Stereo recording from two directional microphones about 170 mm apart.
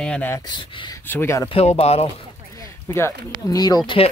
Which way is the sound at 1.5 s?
40° left (ahead or behind).